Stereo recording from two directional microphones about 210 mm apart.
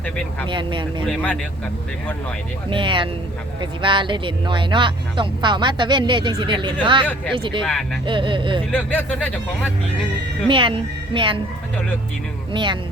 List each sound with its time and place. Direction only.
0.4 s speech: 20° right (ahead or behind)
1.0 s speech: 5° left (ahead or behind)
2.6 s speech: 25° right (ahead or behind)
7.0 s speech: 10° left (ahead or behind)
7.3 s speech: 25° right (ahead or behind)
7.6 s speech: 5° left (ahead or behind)
8.0 s speech: 25° right (ahead or behind)
8.7 s speech: 5° left (ahead or behind)
10.5 s speech: 25° right (ahead or behind)
12.5 s speech: 25° right (ahead or behind)